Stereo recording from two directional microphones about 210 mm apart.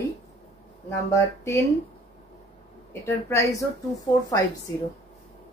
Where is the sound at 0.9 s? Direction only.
15° left (ahead or behind).